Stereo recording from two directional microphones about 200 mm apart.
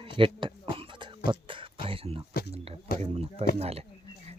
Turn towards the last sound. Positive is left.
turn(degrees=-30)  # may be behind; listen again after turning